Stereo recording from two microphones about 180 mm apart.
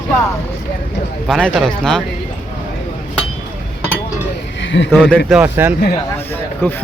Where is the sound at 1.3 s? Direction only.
Centre (ahead or behind).